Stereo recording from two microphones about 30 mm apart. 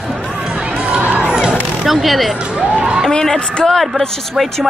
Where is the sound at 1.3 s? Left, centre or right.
Right.